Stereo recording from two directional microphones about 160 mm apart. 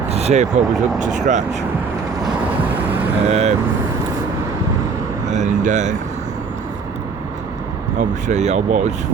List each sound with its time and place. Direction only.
0.1 s speech: 40° right (ahead or behind)
3.2 s speech: 40° right (ahead or behind)
5.3 s speech: 50° right (ahead or behind)
7.9 s speech: 45° right (ahead or behind)